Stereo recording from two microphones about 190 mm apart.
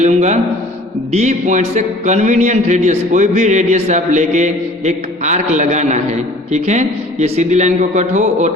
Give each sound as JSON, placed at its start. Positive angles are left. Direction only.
{"t": 0.0, "sound": "a man's voice", "side_deg": -40}